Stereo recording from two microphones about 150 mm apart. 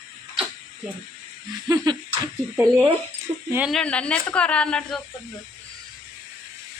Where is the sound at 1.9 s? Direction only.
25° right (ahead or behind).